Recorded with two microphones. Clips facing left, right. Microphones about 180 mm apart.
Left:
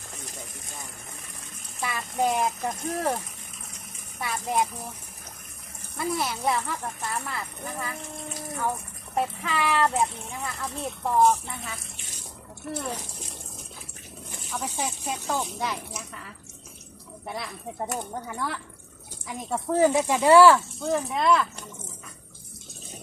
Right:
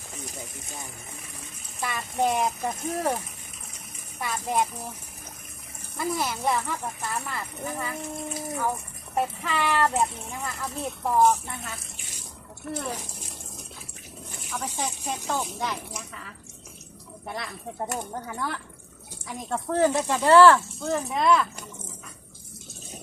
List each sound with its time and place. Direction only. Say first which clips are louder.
1.8 s speech: even; centre (ahead or behind)
4.2 s speech: even; centre (ahead or behind)
6.0 s speech: even; centre (ahead or behind)
14.5 s speech: even; 10° left (ahead or behind)
20.8 s speech: even; centre (ahead or behind)